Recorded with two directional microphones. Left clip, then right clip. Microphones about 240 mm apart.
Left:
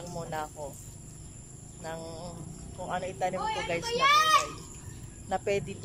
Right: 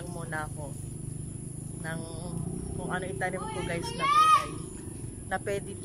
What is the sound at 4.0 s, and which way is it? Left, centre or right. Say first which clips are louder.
Speech: right 1 dB; left.